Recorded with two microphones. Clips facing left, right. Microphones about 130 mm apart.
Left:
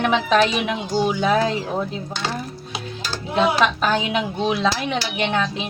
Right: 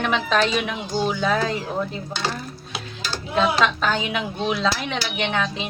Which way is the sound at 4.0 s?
20° left (ahead or behind).